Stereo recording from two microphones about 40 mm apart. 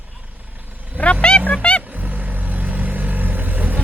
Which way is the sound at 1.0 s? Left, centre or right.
Left.